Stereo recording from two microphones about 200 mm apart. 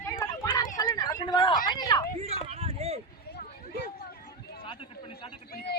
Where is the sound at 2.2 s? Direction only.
30° right (ahead or behind).